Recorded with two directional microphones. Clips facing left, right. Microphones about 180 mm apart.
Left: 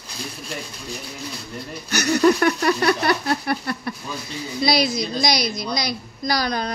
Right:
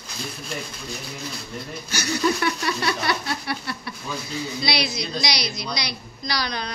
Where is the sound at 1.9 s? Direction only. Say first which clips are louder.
Left 7 dB; 65° left (ahead or behind).